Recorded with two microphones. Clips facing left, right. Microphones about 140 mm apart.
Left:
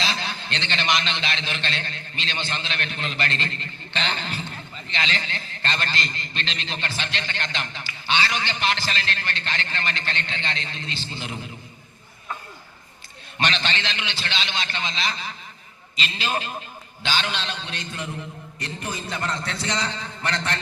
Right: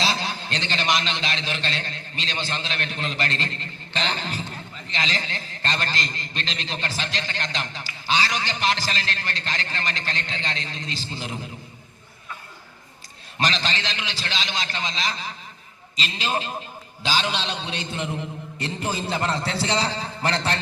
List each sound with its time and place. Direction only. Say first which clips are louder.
0.0 s a man's voice: right 3 dB; 40° right (ahead or behind)
13.4 s a man's voice: even; 35° right (ahead or behind)